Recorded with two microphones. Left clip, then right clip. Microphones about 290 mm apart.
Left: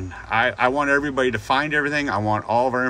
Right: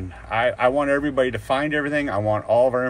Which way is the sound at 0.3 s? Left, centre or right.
Centre.